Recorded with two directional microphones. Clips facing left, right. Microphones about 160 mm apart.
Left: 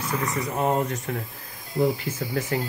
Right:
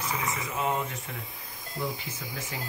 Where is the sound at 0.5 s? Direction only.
45° left (ahead or behind).